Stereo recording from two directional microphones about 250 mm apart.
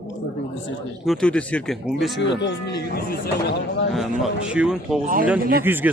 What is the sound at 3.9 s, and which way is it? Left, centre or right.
A man's voice, centre.